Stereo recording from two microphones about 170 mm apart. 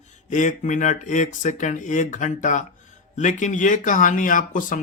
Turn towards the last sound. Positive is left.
turn(degrees=50)  # may be behind; listen again after turning